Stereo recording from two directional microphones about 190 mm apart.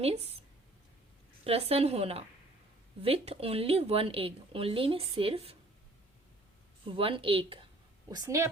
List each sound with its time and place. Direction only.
0.0 s speech: 30° right (ahead or behind)
1.5 s speech: 30° right (ahead or behind)
6.8 s a woman's voice: 30° right (ahead or behind)
8.1 s a woman's voice: 15° right (ahead or behind)